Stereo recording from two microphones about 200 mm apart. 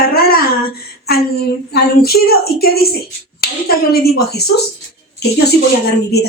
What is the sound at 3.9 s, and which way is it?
Speech, 50° left (ahead or behind).